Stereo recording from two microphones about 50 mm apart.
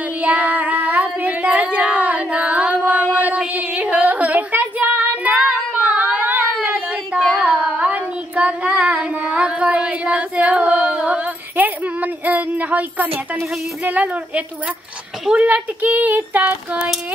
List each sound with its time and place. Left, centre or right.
0.2 s child singing: right
1.4 s singing: right
2.9 s a sound: right
5.9 s singing: right
7.3 s child singing: right
11.5 s a sound: right